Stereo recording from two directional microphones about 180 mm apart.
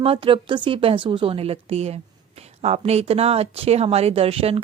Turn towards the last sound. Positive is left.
turn(degrees=-35)  # may be behind; listen again after turning